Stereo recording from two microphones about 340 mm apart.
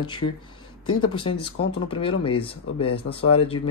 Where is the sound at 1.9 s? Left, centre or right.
Centre.